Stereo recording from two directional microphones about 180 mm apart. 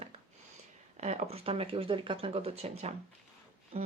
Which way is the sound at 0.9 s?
35° right (ahead or behind).